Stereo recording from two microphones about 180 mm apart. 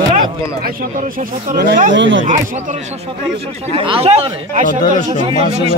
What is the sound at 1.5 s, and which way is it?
Speech, 55° right (ahead or behind).